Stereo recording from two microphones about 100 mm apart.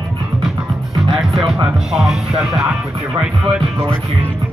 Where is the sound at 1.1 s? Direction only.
Centre (ahead or behind).